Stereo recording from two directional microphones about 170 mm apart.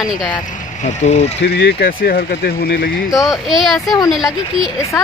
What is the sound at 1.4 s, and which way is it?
Speech, 70° left (ahead or behind).